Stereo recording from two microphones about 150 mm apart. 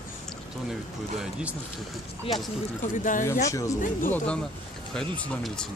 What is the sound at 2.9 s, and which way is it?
Speech, 60° left (ahead or behind).